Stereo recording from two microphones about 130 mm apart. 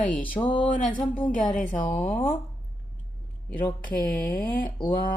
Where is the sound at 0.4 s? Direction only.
30° left (ahead or behind).